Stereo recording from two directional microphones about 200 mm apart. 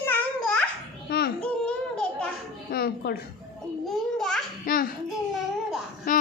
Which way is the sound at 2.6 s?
50° left (ahead or behind).